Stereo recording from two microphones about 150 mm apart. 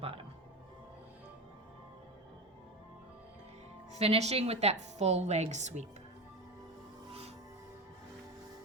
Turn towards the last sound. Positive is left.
turn(degrees=-40)  # may be behind; listen again after turning